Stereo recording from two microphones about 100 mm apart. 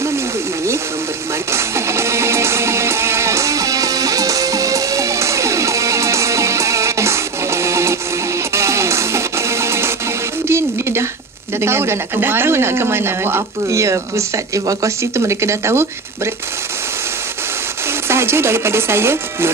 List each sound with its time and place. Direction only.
1.5 s music: 25° right (ahead or behind)
10.5 s a sound: 25° right (ahead or behind)
11.6 s speech: 25° right (ahead or behind)
18.0 s speech: 25° right (ahead or behind)